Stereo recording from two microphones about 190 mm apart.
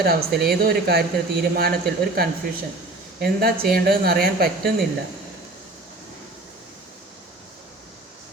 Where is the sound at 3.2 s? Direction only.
55° right (ahead or behind).